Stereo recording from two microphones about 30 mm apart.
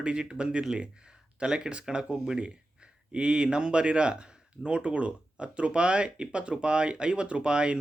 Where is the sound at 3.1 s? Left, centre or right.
Right.